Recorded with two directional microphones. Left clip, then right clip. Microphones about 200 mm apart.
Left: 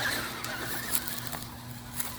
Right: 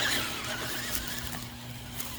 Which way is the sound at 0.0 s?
30° right (ahead or behind).